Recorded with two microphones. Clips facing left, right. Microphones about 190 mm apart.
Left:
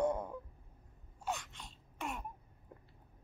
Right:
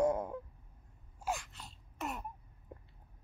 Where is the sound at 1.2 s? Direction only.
5° right (ahead or behind).